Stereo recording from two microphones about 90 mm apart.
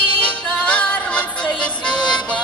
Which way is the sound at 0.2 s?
10° left (ahead or behind).